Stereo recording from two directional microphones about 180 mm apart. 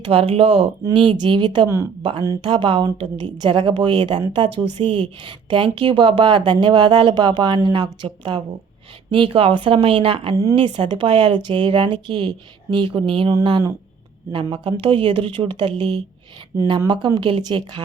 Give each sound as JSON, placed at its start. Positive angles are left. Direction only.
{"t": 0.0, "sound": "a woman's voice", "side_deg": -30}
{"t": 2.0, "sound": "a woman's voice", "side_deg": -30}